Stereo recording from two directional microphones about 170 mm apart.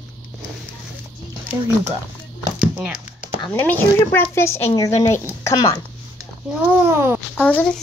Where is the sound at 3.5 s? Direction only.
10° left (ahead or behind).